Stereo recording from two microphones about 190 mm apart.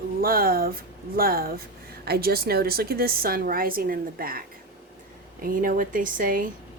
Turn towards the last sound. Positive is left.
turn(degrees=-45)  # may be behind; listen again after turning